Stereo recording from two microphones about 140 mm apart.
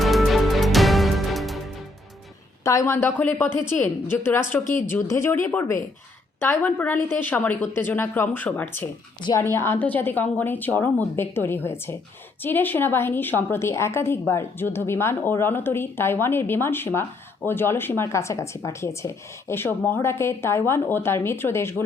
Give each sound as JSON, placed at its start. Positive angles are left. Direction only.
{"t": 0.0, "sound": "music", "side_deg": 0}
{"t": 2.6, "sound": "a woman's voice", "side_deg": 20}